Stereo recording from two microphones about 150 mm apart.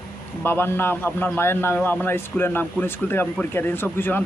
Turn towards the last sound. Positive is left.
turn(degrees=15)  # may be behind; listen again after turning